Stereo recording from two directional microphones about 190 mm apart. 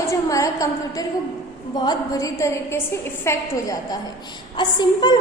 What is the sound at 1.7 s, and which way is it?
A woman's voice, 20° left (ahead or behind).